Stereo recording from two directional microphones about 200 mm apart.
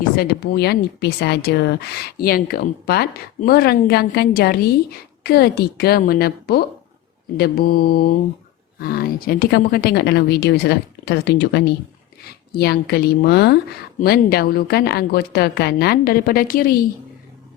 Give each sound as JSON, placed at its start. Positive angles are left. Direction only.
{"t": 0.0, "sound": "speech", "side_deg": 50}